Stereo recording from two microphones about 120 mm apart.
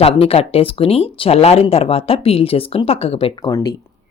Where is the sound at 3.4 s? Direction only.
35° left (ahead or behind).